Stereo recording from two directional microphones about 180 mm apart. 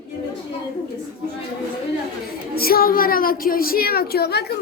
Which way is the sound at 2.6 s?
55° left (ahead or behind).